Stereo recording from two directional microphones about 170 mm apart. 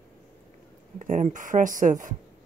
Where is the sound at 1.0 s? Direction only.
45° right (ahead or behind).